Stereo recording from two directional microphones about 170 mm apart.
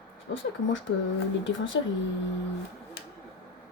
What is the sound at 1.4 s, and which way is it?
Speech, 90° left.